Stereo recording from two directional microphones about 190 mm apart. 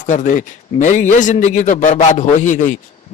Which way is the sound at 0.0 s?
40° left (ahead or behind).